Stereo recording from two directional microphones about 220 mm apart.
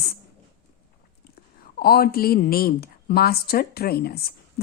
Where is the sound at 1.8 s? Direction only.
45° left (ahead or behind).